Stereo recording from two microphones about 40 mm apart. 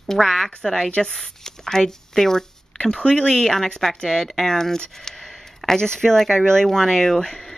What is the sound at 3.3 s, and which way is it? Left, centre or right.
Speech, centre.